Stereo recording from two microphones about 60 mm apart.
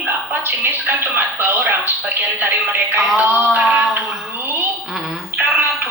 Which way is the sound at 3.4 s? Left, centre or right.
Right.